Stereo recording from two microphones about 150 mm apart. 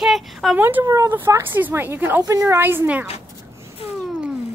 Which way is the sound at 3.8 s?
40° left (ahead or behind).